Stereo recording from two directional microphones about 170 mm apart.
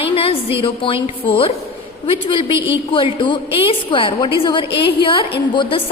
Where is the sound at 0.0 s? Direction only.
35° left (ahead or behind).